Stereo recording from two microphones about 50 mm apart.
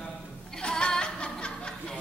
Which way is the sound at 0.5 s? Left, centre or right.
Centre.